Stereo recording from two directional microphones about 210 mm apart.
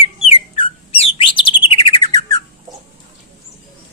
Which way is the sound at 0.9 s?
25° left (ahead or behind).